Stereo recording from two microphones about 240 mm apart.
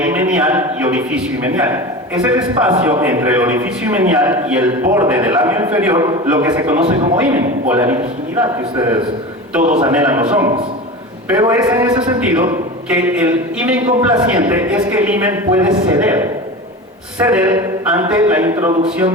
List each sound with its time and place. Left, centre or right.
0.0 s a man's voice: centre
9.6 s a man's voice: right
9.8 s a man's voice: centre